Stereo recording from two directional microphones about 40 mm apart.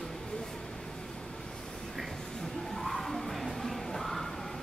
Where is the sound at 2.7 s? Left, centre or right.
Centre.